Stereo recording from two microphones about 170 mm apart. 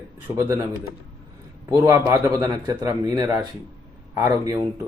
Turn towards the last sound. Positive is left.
turn(degrees=-20)  # may be behind; listen again after turning